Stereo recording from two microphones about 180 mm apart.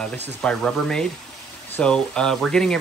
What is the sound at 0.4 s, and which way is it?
Speech, 5° left (ahead or behind).